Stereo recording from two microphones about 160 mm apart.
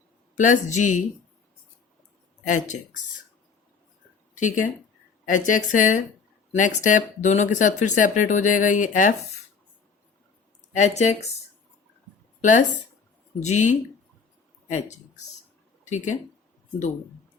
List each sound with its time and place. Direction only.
0.3 s speech: 50° left (ahead or behind)
2.5 s speech: 50° left (ahead or behind)
4.4 s speech: 55° left (ahead or behind)
10.8 s speech: 45° left (ahead or behind)
12.4 s speech: 50° left (ahead or behind)
15.8 s speech: 50° left (ahead or behind)